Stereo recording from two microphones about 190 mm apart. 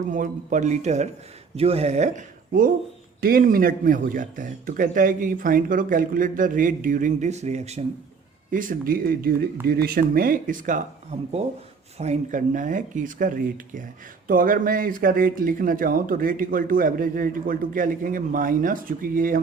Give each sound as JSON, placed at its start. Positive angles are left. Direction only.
{"t": 0.1, "sound": "a man's voice", "side_deg": -40}
{"t": 11.9, "sound": "speech", "side_deg": -35}